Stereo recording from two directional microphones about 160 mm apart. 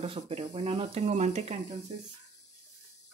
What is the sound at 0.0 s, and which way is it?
Speech, 35° right (ahead or behind).